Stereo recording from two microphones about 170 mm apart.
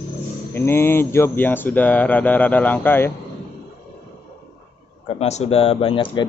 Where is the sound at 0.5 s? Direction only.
15° left (ahead or behind).